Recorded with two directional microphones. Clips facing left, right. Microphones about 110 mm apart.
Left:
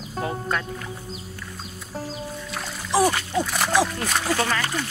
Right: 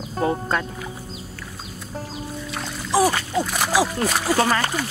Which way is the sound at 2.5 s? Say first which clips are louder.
Right 2 dB; 5° right (ahead or behind).